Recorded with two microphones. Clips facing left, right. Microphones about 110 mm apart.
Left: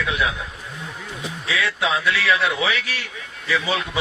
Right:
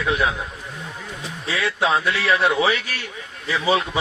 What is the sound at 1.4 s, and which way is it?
A man's voice, 35° right (ahead or behind).